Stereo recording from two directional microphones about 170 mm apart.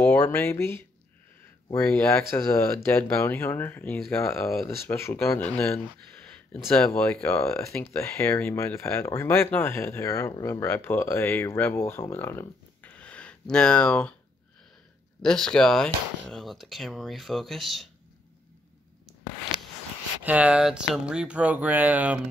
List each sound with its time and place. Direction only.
0.0 s speech: 10° left (ahead or behind)
6.2 s a sound: 10° left (ahead or behind)
7.0 s speech: 5° left (ahead or behind)
15.2 s speech: 5° left (ahead or behind)
20.2 s speech: 10° right (ahead or behind)